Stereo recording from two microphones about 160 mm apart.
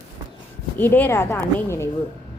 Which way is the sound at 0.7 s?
10° left (ahead or behind).